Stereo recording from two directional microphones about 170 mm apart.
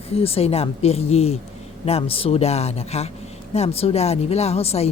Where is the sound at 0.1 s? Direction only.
35° left (ahead or behind).